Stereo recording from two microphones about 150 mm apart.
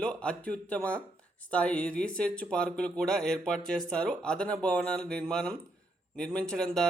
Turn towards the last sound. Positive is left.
turn(degrees=5)  # may be behind; listen again after turning